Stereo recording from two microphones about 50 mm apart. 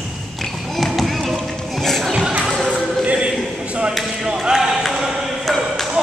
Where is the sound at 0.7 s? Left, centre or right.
Centre.